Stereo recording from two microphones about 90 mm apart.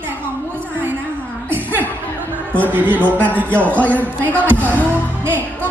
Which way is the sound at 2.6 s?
20° right (ahead or behind).